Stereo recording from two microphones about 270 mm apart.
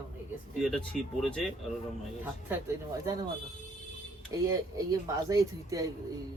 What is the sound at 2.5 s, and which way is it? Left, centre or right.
Speech, centre.